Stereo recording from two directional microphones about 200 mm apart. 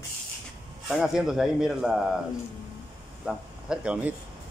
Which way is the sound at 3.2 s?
5° right (ahead or behind).